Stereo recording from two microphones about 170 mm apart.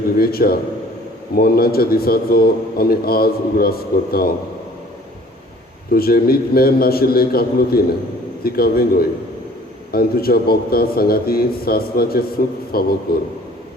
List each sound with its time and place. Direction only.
0.2 s a man's voice: 60° left (ahead or behind)
5.9 s a man's voice: 60° left (ahead or behind)